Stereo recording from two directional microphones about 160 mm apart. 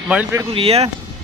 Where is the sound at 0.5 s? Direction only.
40° right (ahead or behind).